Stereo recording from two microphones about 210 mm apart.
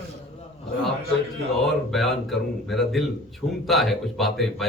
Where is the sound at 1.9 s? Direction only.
Centre (ahead or behind).